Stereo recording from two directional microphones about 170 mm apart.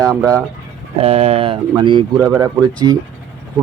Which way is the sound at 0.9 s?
35° right (ahead or behind).